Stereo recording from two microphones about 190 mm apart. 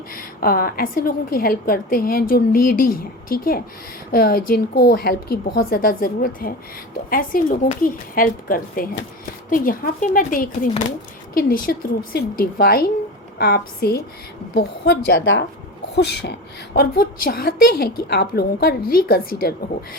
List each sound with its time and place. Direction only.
0.1 s a woman's voice: 50° left (ahead or behind); by 15.4 s 80° left
16.0 s speech: 60° left (ahead or behind)
16.7 s a woman's voice: 50° left (ahead or behind)